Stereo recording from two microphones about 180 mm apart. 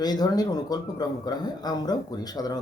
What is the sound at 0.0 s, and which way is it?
Speech, 20° left (ahead or behind).